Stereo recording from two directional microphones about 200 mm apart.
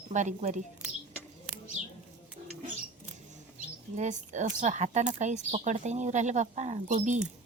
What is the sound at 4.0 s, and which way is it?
Speech, 35° right (ahead or behind).